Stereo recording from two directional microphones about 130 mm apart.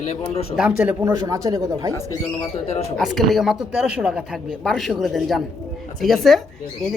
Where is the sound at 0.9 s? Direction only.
25° right (ahead or behind).